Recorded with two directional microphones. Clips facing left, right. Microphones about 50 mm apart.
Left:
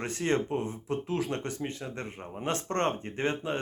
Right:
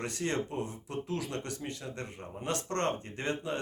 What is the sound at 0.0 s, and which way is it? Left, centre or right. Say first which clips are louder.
Speech: left 4 dB; left.